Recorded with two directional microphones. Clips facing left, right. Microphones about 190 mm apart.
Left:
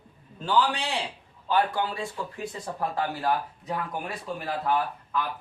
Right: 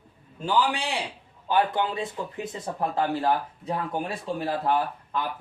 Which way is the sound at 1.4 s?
20° right (ahead or behind).